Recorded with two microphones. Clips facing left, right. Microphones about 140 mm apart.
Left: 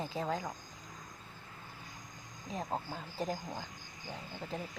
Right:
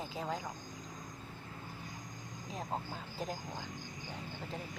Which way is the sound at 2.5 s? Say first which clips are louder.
Left 2 dB; centre (ahead or behind).